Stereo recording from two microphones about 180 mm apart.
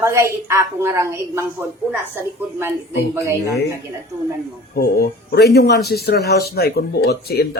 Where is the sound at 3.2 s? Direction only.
15° right (ahead or behind).